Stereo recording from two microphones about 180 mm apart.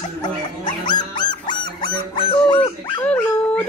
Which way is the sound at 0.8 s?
25° left (ahead or behind).